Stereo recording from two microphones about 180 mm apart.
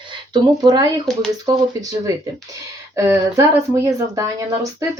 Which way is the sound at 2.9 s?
15° right (ahead or behind).